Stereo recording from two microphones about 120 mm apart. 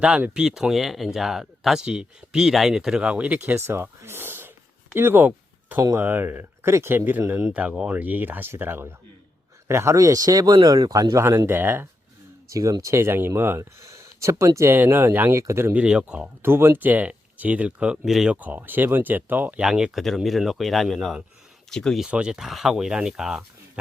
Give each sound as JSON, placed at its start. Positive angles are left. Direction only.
{"t": 0.0, "sound": "speech", "side_deg": -10}
{"t": 15.8, "sound": "speech", "side_deg": -10}